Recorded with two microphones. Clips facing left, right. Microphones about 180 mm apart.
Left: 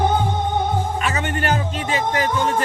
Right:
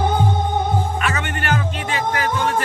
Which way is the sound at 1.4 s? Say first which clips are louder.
Even; 40° left (ahead or behind).